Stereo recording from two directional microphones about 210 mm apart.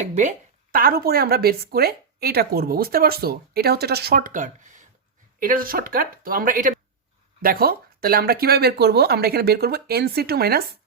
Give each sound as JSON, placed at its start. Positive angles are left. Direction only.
{"t": 0.0, "sound": "speech", "side_deg": -35}